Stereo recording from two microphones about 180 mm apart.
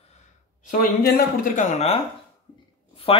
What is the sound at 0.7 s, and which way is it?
Speech, 55° left (ahead or behind).